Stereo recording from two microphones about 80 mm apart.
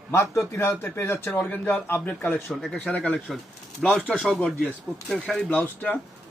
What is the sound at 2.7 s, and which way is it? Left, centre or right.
Speech, centre.